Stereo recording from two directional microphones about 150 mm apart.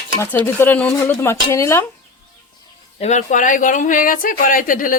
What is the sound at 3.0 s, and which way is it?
Speech, 55° left (ahead or behind).